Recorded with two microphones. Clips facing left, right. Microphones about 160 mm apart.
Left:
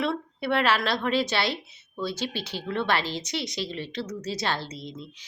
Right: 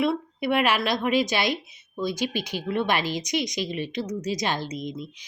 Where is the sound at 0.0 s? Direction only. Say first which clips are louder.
Right 4 dB; 15° right (ahead or behind).